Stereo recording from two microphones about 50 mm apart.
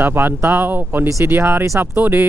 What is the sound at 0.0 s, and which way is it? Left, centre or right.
Speech, right.